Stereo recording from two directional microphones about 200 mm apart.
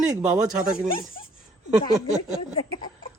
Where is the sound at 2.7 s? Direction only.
25° left (ahead or behind).